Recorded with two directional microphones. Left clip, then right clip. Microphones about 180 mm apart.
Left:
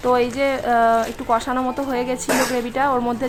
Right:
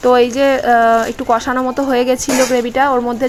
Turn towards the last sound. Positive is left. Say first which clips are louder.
# right 6 dB
turn(degrees=-15)  # may be behind; listen again after turning